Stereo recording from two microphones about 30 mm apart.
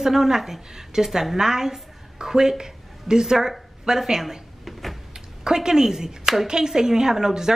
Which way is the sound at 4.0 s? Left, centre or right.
Centre.